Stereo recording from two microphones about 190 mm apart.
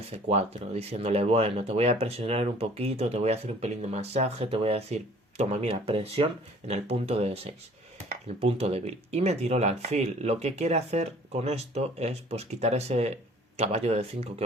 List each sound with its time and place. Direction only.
0.0 s speech: 35° right (ahead or behind)